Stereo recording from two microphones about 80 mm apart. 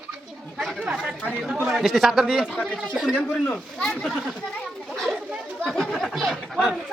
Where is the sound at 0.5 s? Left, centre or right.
Centre.